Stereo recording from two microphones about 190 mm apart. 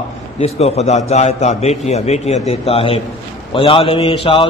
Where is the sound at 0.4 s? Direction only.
35° left (ahead or behind).